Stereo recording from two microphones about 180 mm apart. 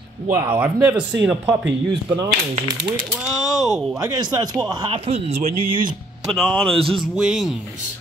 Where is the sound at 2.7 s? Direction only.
65° right (ahead or behind).